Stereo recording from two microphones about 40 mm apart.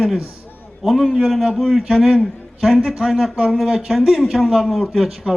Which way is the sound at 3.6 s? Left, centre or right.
Right.